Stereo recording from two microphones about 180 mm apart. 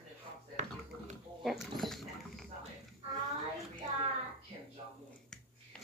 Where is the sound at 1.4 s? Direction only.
Centre (ahead or behind).